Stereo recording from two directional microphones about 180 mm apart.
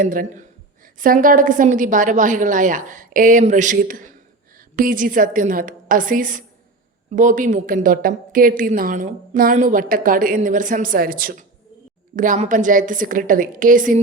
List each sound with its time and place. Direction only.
0.0 s a woman's voice: 50° right (ahead or behind)